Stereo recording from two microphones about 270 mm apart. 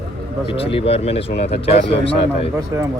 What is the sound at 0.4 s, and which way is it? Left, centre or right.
Speech, left.